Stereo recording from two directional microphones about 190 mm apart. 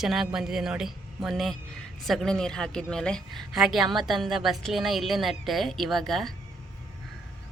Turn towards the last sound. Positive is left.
turn(degrees=0)  # may be behind; listen again after turning